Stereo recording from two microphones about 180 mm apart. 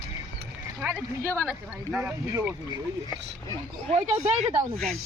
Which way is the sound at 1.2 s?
15° right (ahead or behind).